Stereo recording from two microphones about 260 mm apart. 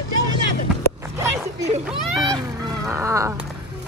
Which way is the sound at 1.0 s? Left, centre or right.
Centre.